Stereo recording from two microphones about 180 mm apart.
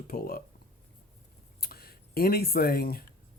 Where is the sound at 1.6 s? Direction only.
60° left (ahead or behind).